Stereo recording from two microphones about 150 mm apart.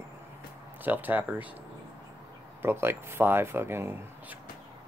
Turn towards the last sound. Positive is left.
turn(degrees=-15)  # may be behind; listen again after turning